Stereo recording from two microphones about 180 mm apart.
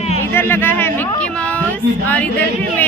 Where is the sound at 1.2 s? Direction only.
5° left (ahead or behind).